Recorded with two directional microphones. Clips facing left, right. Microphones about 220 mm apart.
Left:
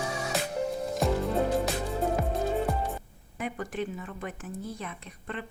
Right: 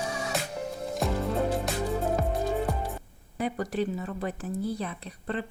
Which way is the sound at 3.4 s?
35° right (ahead or behind).